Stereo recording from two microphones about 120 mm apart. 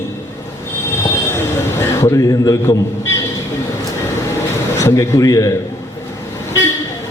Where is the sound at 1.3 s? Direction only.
25° left (ahead or behind).